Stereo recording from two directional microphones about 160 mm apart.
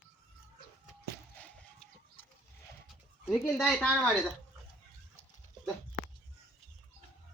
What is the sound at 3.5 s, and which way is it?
Speech, centre (ahead or behind).